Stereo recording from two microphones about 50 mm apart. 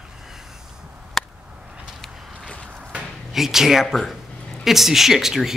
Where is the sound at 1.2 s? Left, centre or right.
Centre.